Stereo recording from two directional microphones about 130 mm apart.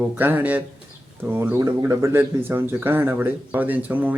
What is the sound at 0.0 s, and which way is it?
Speech, 15° right (ahead or behind).